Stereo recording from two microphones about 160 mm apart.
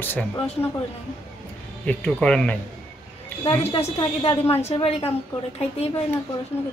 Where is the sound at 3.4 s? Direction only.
30° left (ahead or behind).